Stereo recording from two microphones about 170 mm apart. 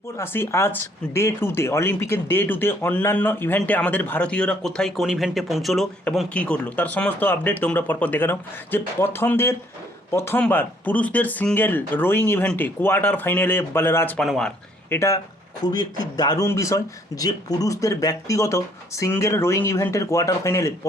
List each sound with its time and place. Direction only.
0.2 s speech: 15° left (ahead or behind)
14.9 s speech: 15° left (ahead or behind)